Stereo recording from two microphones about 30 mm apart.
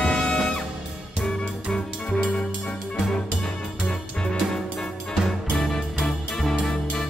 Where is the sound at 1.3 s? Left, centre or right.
Left.